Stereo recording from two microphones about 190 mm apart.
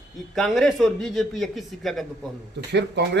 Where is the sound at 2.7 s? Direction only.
65° right (ahead or behind).